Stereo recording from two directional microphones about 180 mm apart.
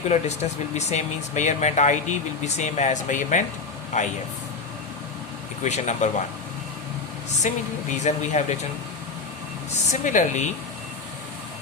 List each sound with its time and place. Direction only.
0.1 s speech: 40° left (ahead or behind)
5.6 s speech: 40° left (ahead or behind)
7.5 s speech: 45° left (ahead or behind)
9.9 s speech: 45° left (ahead or behind)